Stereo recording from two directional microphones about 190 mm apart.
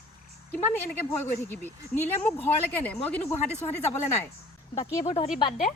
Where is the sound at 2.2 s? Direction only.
10° left (ahead or behind).